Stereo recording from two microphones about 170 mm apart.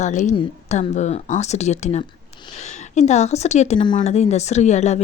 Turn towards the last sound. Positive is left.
turn(degrees=40)  # may be behind; listen again after turning